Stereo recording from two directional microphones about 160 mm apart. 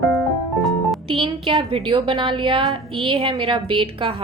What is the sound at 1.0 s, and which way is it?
A woman's voice, 30° right (ahead or behind).